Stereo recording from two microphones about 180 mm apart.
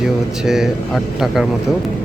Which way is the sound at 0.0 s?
Centre (ahead or behind).